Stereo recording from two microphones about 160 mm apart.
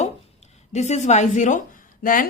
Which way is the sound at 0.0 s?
45° left (ahead or behind).